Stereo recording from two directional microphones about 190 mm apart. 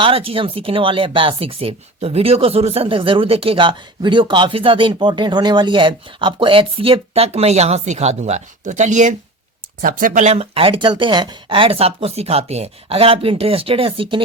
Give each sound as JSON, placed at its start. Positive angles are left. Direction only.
{"t": 0.0, "sound": "speech", "side_deg": -30}